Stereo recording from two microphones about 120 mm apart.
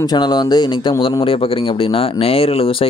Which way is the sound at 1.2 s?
50° left (ahead or behind).